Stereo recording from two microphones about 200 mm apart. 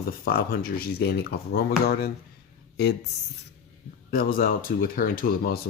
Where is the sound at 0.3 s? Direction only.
50° left (ahead or behind).